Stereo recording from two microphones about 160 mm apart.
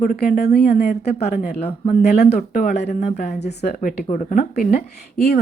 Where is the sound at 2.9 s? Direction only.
45° left (ahead or behind).